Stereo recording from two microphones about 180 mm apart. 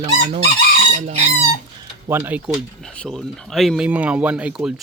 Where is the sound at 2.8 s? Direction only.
5° left (ahead or behind).